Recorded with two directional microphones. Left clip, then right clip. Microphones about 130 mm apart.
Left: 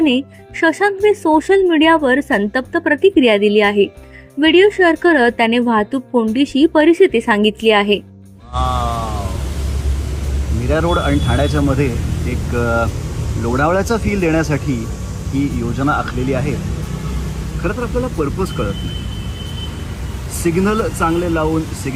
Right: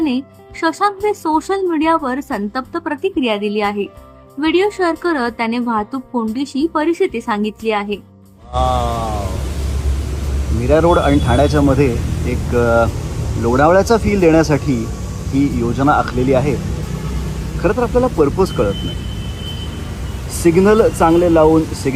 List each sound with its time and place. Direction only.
0.6 s a woman's voice: 20° left (ahead or behind)
8.5 s a sound: centre (ahead or behind)
10.5 s speech: centre (ahead or behind)
20.4 s speech: centre (ahead or behind)